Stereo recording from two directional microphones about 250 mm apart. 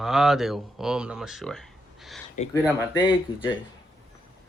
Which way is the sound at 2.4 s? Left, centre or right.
Left.